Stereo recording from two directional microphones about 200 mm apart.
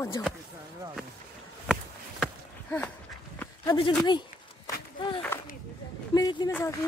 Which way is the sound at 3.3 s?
20° left (ahead or behind).